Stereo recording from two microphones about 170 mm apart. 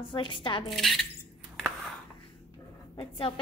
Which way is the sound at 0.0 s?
30° left (ahead or behind).